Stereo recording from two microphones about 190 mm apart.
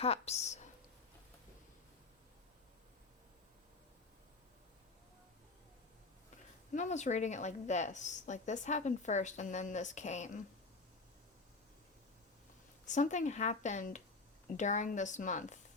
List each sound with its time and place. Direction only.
0.0 s a woman's voice: 35° left (ahead or behind)
6.7 s a woman's voice: 40° left (ahead or behind)
12.8 s a woman's voice: 40° left (ahead or behind)